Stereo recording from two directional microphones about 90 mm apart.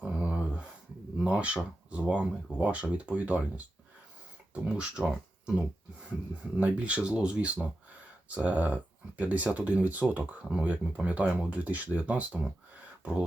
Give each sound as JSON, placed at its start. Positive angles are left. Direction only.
{"t": 0.0, "sound": "a sound", "side_deg": -10}
{"t": 1.2, "sound": "speech", "side_deg": -10}
{"t": 4.5, "sound": "speech", "side_deg": -10}